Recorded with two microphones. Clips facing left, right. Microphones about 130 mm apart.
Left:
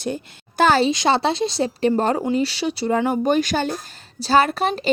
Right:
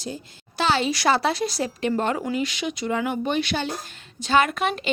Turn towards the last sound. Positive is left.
turn(degrees=35)  # may be behind; listen again after turning